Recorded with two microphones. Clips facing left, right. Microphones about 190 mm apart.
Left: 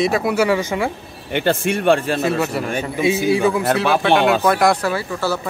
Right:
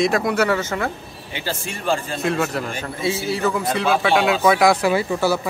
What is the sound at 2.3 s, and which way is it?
Speech, 5° left (ahead or behind).